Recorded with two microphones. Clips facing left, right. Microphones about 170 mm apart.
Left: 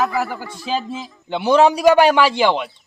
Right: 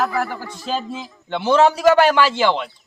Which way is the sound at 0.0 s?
5° left (ahead or behind).